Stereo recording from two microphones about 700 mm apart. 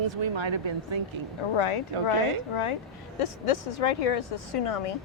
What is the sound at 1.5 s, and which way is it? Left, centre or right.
A woman's voice, left.